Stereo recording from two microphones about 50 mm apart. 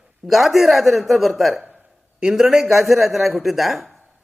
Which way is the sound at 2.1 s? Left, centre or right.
Centre.